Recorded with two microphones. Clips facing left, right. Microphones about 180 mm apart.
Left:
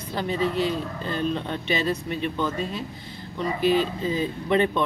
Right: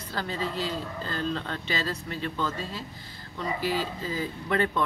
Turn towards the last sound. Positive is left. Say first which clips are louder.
# left 5 dB
turn(degrees=20)  # may be behind; listen again after turning